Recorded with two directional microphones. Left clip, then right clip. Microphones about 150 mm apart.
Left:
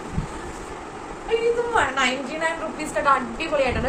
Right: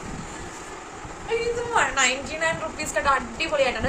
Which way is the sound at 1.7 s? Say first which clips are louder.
Left 1 dB; 25° right (ahead or behind).